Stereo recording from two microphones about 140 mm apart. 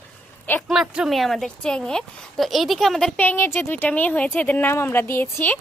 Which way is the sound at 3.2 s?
15° left (ahead or behind).